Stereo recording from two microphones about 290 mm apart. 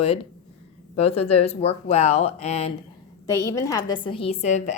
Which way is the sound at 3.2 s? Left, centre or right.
Centre.